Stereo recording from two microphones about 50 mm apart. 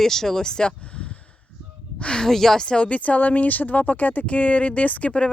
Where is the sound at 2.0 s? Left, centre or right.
Centre.